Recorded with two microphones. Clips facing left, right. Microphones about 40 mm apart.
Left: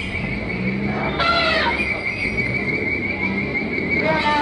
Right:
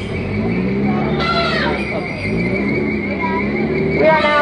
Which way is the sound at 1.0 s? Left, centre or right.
Centre.